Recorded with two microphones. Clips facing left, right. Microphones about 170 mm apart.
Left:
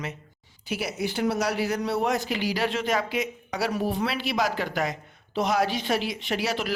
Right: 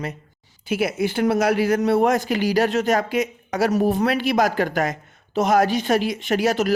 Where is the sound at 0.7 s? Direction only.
55° right (ahead or behind).